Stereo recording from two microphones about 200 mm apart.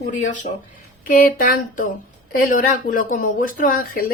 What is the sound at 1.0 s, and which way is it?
Speech, 45° left (ahead or behind).